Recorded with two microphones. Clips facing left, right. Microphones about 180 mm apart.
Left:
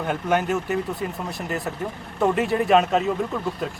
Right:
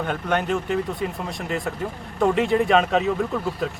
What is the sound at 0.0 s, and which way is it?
Speech, 5° left (ahead or behind).